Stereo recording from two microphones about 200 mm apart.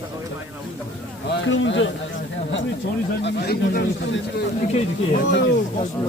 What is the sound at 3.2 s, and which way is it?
Speech, 50° left (ahead or behind).